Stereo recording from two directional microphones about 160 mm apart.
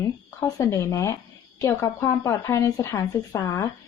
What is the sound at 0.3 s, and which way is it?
A woman's voice, 20° left (ahead or behind).